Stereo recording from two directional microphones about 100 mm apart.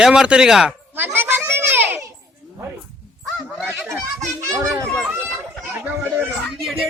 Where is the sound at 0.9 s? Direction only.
20° right (ahead or behind).